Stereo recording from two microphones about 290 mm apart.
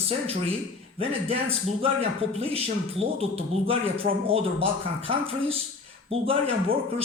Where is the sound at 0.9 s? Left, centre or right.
Centre.